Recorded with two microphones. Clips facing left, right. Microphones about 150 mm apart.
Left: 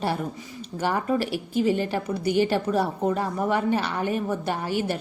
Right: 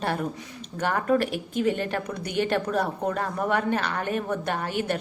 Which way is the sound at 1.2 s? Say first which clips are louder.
Left 1 dB; 55° right (ahead or behind).